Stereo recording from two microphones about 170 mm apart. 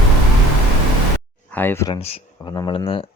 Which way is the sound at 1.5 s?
10° left (ahead or behind).